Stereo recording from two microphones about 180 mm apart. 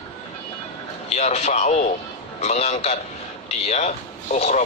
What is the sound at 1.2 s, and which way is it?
Speech, 40° left (ahead or behind).